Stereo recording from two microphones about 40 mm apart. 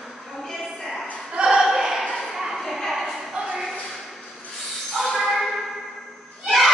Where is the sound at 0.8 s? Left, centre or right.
Centre.